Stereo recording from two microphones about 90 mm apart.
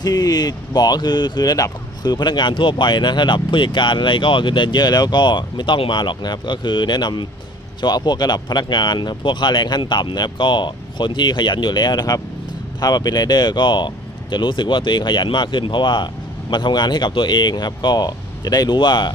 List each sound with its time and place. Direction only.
0.0 s speech: 45° left (ahead or behind)